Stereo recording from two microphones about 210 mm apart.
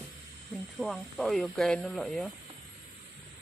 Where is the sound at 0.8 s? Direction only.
Centre (ahead or behind).